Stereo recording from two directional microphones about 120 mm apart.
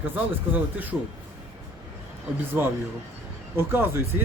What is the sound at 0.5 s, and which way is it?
Speech, 15° right (ahead or behind).